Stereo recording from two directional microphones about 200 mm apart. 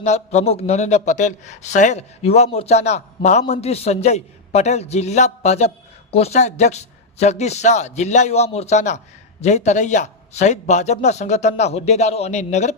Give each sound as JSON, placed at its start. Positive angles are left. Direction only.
{"t": 0.0, "sound": "a man's voice", "side_deg": 35}